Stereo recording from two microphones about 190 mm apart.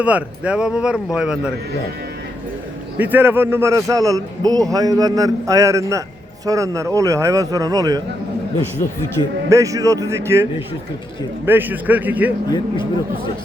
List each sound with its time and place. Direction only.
0.0 s speech: 5° right (ahead or behind)
3.0 s a man's voice: 10° right (ahead or behind)
9.5 s a man's voice: 15° right (ahead or behind)
12.5 s speech: 25° left (ahead or behind)